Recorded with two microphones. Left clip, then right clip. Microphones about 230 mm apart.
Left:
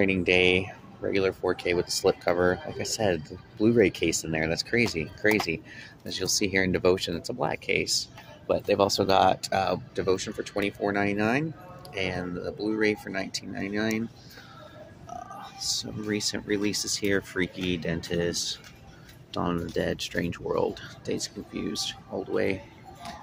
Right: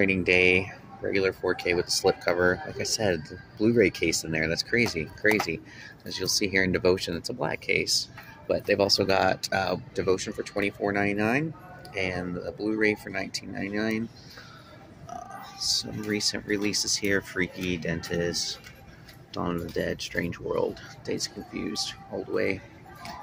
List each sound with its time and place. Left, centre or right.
0.0 s speech: centre
15.0 s speech: centre